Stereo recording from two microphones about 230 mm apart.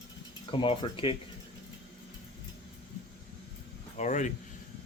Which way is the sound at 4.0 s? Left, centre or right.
Left.